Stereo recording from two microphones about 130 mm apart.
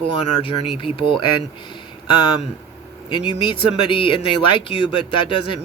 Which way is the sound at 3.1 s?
35° left (ahead or behind).